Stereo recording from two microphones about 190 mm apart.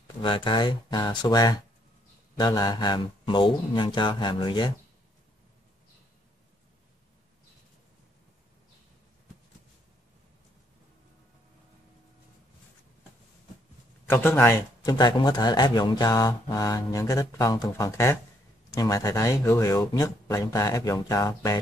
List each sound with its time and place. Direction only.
0.2 s speech: 25° left (ahead or behind)
14.0 s speech: 10° left (ahead or behind)